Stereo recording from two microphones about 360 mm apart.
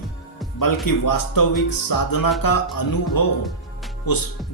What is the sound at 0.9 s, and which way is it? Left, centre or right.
A man's voice, left.